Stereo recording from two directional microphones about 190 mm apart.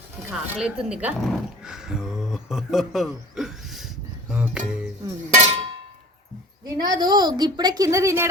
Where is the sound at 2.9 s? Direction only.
Centre (ahead or behind).